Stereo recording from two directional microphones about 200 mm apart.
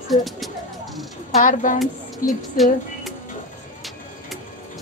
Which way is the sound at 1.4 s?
40° left (ahead or behind).